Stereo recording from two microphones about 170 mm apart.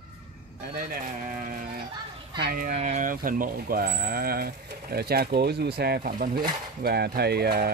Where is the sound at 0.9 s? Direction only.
50° right (ahead or behind).